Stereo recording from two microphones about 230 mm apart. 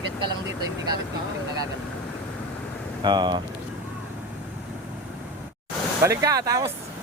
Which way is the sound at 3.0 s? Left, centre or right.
Centre.